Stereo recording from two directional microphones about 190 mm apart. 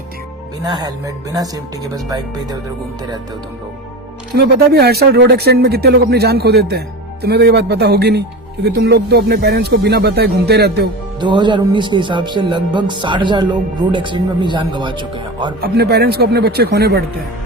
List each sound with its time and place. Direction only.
0.6 s speech: 20° right (ahead or behind)
4.4 s speech: 55° right (ahead or behind)
11.2 s speech: 25° right (ahead or behind)
15.6 s speech: 55° right (ahead or behind)